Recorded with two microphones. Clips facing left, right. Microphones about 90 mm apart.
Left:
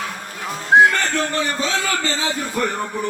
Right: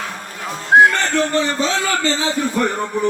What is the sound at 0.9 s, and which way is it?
A man's voice, 30° right (ahead or behind).